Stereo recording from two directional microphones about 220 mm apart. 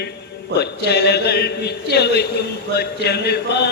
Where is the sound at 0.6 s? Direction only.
50° left (ahead or behind).